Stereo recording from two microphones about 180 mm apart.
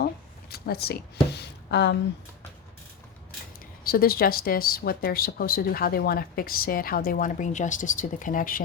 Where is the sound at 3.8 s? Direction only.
55° left (ahead or behind).